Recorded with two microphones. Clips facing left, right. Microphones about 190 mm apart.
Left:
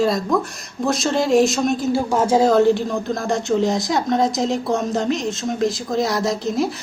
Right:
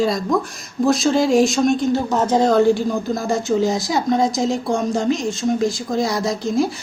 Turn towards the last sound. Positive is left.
turn(degrees=0)  # may be behind; listen again after turning